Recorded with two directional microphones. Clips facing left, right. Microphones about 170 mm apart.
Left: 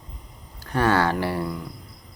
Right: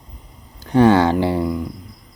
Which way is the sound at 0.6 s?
20° right (ahead or behind).